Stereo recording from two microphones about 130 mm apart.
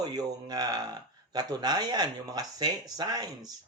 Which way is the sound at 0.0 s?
30° right (ahead or behind).